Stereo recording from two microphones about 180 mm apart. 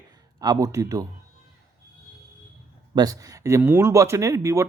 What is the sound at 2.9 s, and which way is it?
Speech, 20° right (ahead or behind).